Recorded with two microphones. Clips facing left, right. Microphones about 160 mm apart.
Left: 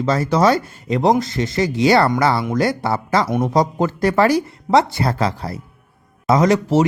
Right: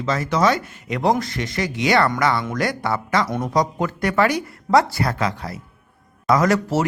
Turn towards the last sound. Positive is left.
turn(degrees=20)  # may be behind; listen again after turning